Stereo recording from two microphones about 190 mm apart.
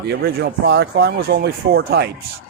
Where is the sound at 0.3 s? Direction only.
60° right (ahead or behind).